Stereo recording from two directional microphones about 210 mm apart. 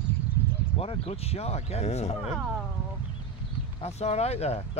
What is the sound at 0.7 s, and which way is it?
Speech, 25° left (ahead or behind).